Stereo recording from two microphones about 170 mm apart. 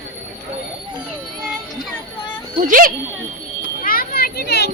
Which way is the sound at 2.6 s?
55° right (ahead or behind).